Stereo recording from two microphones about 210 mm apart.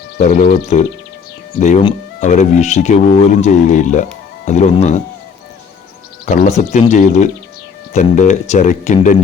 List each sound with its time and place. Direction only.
0.3 s speech: 35° left (ahead or behind)
6.2 s speech: 35° left (ahead or behind)